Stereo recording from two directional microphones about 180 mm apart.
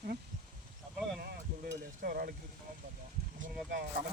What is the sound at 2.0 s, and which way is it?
Stir, 55° right (ahead or behind).